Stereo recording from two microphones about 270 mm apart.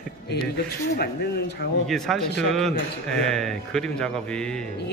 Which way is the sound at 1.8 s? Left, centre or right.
Centre.